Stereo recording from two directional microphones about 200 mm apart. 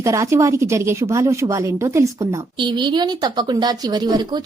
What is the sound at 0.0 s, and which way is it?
Speech, 15° right (ahead or behind).